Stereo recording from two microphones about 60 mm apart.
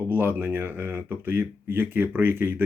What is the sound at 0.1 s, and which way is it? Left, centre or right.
Speech, right.